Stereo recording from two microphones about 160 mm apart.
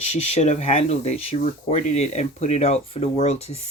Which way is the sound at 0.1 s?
45° left (ahead or behind).